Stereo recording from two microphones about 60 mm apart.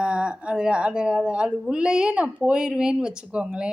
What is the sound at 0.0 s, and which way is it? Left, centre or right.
Speech, centre.